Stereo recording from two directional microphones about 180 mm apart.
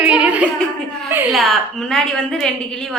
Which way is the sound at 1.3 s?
5° left (ahead or behind).